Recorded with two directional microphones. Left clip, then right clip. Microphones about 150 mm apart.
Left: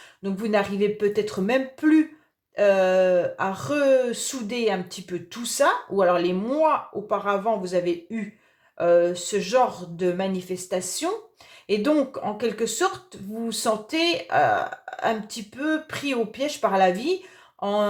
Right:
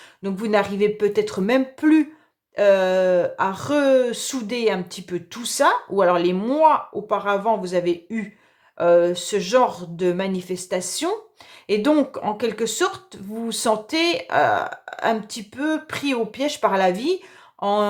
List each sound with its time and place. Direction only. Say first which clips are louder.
0.2 s speech: right 3 dB; 35° right (ahead or behind)